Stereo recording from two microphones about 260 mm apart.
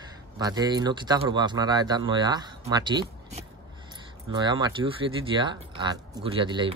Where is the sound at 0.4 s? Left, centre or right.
Centre.